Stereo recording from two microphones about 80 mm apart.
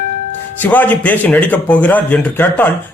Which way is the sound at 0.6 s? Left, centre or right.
Left.